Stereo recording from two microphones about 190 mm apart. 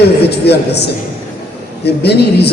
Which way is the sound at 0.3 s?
60° left (ahead or behind).